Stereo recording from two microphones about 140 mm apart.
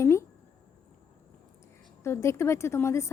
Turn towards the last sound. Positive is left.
turn(degrees=20)  # may be behind; listen again after turning